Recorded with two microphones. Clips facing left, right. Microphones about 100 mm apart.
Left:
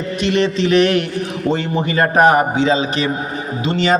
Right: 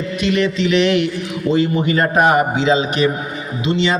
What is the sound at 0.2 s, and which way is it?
A man's voice, 35° left (ahead or behind).